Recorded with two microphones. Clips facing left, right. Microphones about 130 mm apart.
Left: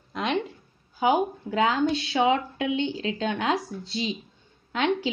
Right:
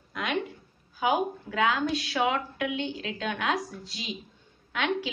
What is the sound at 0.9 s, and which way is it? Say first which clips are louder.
A woman's voice: left 4 dB; 25° left (ahead or behind).